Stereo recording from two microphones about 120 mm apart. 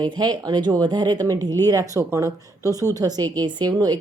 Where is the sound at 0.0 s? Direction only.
35° right (ahead or behind).